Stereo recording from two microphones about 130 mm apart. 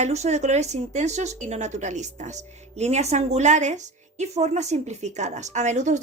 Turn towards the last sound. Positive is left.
turn(degrees=-65)  # may be behind; listen again after turning